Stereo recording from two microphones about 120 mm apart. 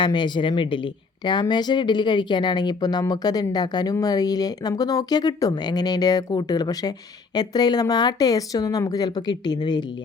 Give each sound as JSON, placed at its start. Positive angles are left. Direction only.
{"t": 0.0, "sound": "speech", "side_deg": 40}